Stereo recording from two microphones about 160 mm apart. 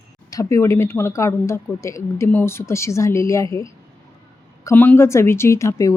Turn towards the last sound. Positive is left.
turn(degrees=20)  # may be behind; listen again after turning